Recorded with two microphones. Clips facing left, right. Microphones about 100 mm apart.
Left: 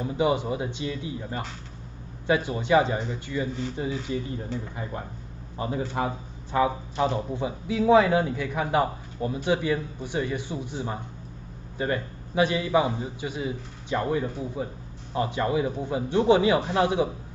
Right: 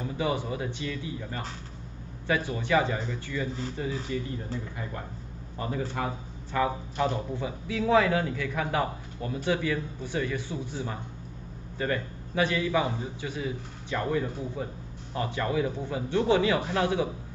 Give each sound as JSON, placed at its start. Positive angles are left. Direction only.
{"t": 0.0, "sound": "a man's voice", "side_deg": 20}
{"t": 5.6, "sound": "a man's voice", "side_deg": 25}